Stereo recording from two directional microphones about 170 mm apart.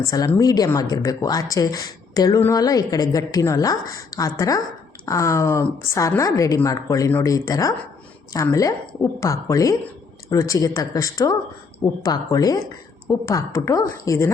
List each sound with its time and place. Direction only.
0.0 s a woman's voice: 20° left (ahead or behind)